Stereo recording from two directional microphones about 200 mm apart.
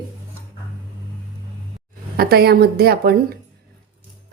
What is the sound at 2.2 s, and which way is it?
A woman's voice, 50° right (ahead or behind).